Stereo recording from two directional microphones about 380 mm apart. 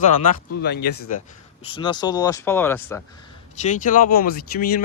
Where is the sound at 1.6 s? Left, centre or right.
Centre.